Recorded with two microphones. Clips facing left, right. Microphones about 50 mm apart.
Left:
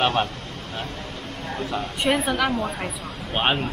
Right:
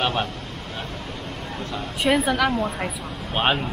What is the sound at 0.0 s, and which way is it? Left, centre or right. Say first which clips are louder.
Speech: left 2 dB; centre.